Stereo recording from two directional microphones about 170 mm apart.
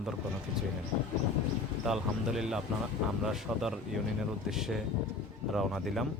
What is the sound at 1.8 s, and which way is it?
Speech, 5° right (ahead or behind).